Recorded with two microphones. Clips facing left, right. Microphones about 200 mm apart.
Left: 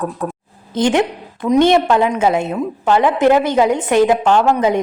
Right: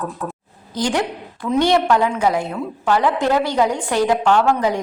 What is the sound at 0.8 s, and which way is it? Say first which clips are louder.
A woman's voice: left 6 dB; 20° left (ahead or behind).